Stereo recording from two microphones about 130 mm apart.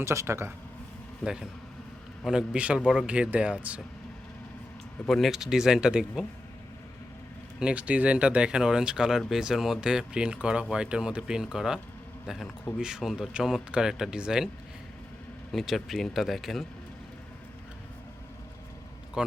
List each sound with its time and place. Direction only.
0.0 s speech: 20° right (ahead or behind)
1.2 s speech: 5° right (ahead or behind)
5.0 s speech: centre (ahead or behind)
7.6 s a man's voice: 10° right (ahead or behind)
15.5 s speech: centre (ahead or behind)
19.2 s a man's voice: 10° right (ahead or behind)